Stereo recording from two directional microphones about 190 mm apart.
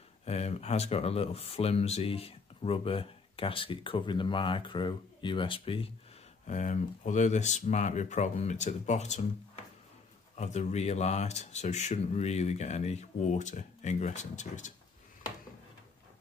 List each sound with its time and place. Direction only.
0.2 s speech: 35° left (ahead or behind)
6.4 s speech: 40° left (ahead or behind)
10.3 s speech: 35° left (ahead or behind)